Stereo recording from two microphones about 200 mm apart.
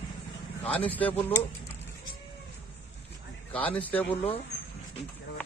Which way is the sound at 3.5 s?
10° left (ahead or behind).